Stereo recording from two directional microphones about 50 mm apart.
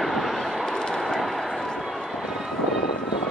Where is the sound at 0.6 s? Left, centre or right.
Centre.